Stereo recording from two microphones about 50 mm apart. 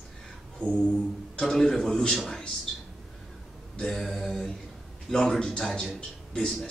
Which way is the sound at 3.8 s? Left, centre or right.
Centre.